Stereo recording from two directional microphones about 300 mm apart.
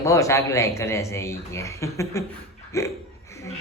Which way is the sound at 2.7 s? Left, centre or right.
Centre.